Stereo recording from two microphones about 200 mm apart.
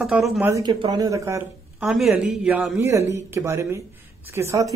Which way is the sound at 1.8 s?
Centre (ahead or behind).